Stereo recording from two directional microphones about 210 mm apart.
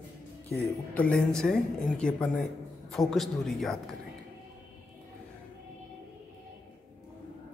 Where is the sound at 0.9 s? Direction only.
5° left (ahead or behind).